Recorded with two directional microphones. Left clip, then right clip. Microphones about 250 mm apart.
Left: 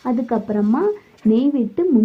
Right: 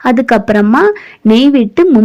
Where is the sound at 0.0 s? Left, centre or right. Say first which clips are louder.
Right 12 dB; right.